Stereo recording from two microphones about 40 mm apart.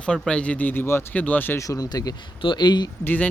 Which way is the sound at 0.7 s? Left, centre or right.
Left.